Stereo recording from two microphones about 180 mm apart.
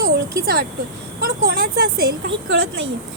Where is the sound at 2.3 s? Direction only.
90° right.